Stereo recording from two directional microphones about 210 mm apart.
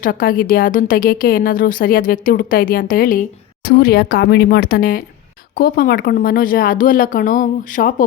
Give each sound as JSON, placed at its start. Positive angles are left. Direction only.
{"t": 0.0, "sound": "a woman's voice", "side_deg": 40}